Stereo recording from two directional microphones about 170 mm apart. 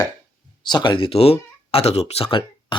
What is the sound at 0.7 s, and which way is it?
A man's voice, 25° left (ahead or behind).